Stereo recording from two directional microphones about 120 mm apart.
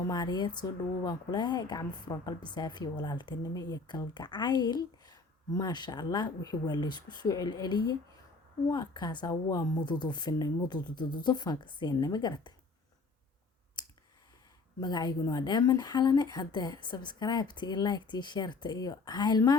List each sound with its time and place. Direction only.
0.1 s speech: 35° left (ahead or behind)
13.8 s clicking: 35° left (ahead or behind)
14.8 s speech: 35° left (ahead or behind)